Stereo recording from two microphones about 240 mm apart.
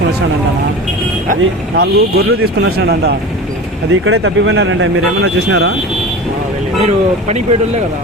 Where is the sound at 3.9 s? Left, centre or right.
Right.